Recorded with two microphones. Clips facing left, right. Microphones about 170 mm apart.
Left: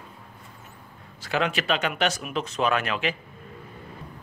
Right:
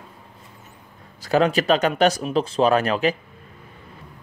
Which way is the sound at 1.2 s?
40° right (ahead or behind).